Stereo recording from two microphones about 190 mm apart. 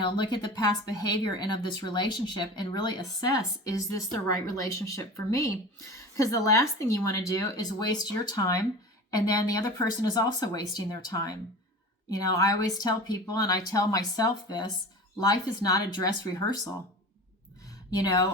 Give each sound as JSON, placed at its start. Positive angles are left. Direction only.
{"t": 0.0, "sound": "a woman's voice", "side_deg": 25}